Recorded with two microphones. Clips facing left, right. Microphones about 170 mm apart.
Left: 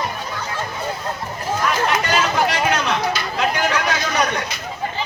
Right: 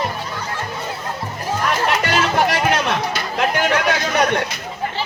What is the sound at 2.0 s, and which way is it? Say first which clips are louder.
Music: right 1 dB; 55° right (ahead or behind).